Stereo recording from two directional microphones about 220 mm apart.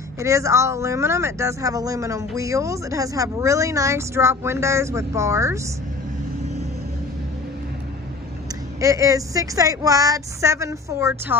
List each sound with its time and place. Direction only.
0.2 s speech: 15° right (ahead or behind)
8.8 s speech: 15° right (ahead or behind)